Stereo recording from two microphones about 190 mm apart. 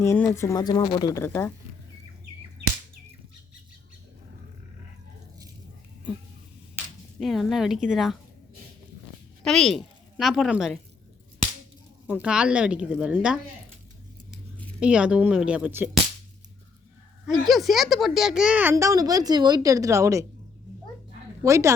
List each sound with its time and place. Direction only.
0.0 s speech: 15° left (ahead or behind)
7.2 s speech: centre (ahead or behind)
9.4 s a woman's voice: centre (ahead or behind)
12.0 s speech: 5° right (ahead or behind)
14.8 s speech: 5° right (ahead or behind)
17.4 s speech: centre (ahead or behind); by 20.2 s 15° right (ahead or behind)
21.4 s speech: 15° right (ahead or behind)